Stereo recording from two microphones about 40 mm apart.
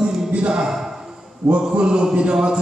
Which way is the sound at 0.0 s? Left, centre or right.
Centre.